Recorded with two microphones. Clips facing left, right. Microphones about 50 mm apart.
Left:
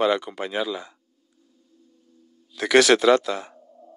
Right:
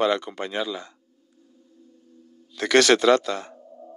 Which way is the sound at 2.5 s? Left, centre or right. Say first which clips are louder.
Left 1 dB; centre.